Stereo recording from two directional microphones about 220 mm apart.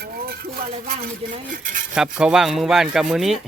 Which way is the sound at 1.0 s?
35° right (ahead or behind).